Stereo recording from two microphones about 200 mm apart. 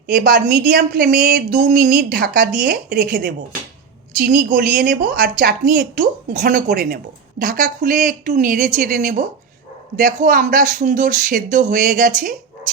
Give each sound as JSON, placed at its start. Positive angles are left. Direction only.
{"t": 0.1, "sound": "a woman's voice", "side_deg": -45}